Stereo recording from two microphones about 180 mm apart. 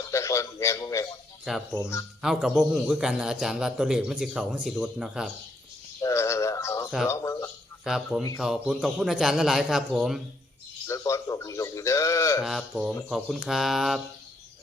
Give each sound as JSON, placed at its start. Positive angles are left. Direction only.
{"t": 0.1, "sound": "a man's voice", "side_deg": 15}
{"t": 1.5, "sound": "a man's voice", "side_deg": 0}
{"t": 6.0, "sound": "synthetic singing", "side_deg": 15}
{"t": 7.1, "sound": "speech", "side_deg": 15}
{"t": 7.9, "sound": "a man's voice", "side_deg": 0}
{"t": 10.8, "sound": "a sound", "side_deg": 15}
{"t": 12.4, "sound": "a man's voice", "side_deg": 0}